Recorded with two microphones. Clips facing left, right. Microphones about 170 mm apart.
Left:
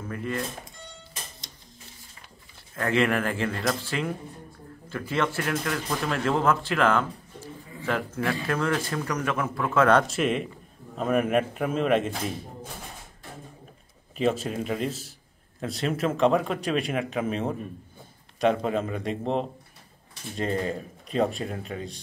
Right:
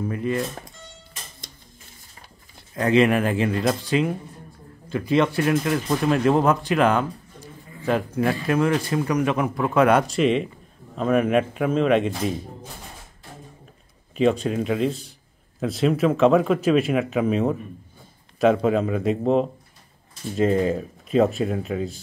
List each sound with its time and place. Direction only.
0.1 s speech: 20° right (ahead or behind)
2.7 s speech: 20° right (ahead or behind)
10.0 s speech: centre (ahead or behind)
14.1 s speech: 5° left (ahead or behind)
21.1 s speech: centre (ahead or behind)